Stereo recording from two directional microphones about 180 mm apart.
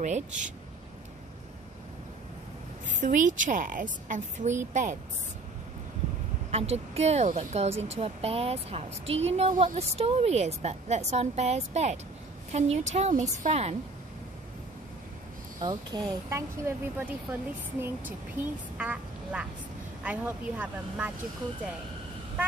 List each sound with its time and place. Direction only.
0.0 s speech: 40° right (ahead or behind)
3.0 s a woman's voice: 45° right (ahead or behind)
6.5 s speech: 35° right (ahead or behind)
15.6 s speech: 20° right (ahead or behind)